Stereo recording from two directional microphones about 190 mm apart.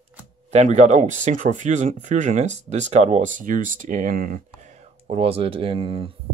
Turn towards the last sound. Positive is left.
turn(degrees=-30)  # may be behind; listen again after turning